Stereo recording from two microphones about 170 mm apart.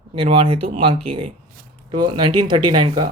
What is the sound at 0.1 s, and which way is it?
Speech, 30° right (ahead or behind).